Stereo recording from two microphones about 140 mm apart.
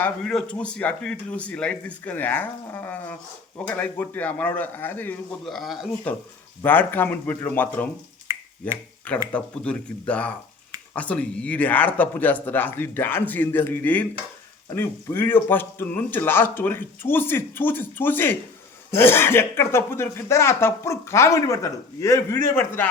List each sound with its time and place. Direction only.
0.0 s speech: 5° left (ahead or behind)
5.5 s speech: centre (ahead or behind)
6.6 s speech: 15° left (ahead or behind)